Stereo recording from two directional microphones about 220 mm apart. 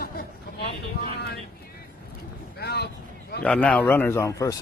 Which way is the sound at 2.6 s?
45° left (ahead or behind).